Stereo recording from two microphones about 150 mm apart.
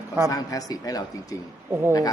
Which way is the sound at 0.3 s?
25° left (ahead or behind).